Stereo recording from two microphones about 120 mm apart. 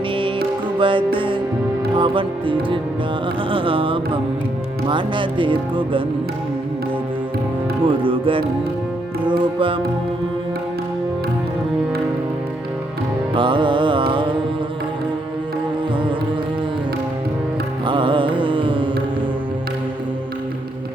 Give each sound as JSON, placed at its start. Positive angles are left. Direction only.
{"t": 0.8, "sound": "music", "side_deg": -45}
{"t": 2.0, "sound": "speech", "side_deg": -45}
{"t": 7.9, "sound": "speech", "side_deg": -45}
{"t": 13.3, "sound": "speech", "side_deg": -45}
{"t": 17.8, "sound": "music", "side_deg": -45}